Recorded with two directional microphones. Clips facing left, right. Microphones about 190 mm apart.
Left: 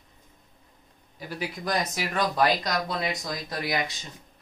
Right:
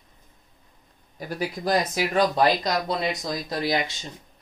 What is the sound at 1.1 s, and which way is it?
Speech, 40° right (ahead or behind).